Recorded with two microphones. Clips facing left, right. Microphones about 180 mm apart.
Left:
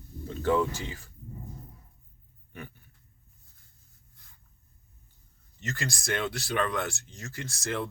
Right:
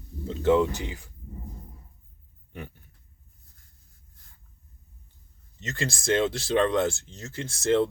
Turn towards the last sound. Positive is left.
turn(degrees=-25)  # may be behind; listen again after turning